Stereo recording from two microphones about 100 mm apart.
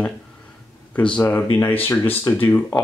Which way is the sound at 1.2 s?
25° left (ahead or behind).